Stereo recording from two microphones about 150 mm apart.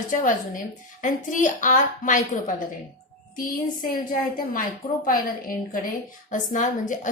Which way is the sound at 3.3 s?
70° left (ahead or behind).